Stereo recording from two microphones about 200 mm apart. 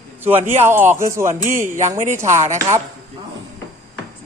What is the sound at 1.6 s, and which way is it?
Speech, 40° right (ahead or behind).